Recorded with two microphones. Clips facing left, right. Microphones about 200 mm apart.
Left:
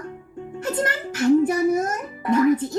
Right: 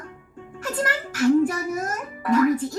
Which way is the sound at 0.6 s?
25° left (ahead or behind).